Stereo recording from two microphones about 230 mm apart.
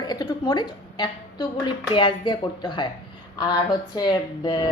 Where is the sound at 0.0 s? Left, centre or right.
Centre.